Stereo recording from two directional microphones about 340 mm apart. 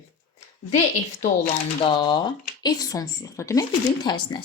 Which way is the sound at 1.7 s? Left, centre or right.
Centre.